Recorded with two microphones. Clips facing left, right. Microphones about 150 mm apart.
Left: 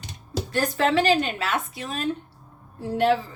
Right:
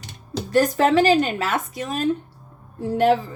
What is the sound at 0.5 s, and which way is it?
A woman's voice, 45° right (ahead or behind).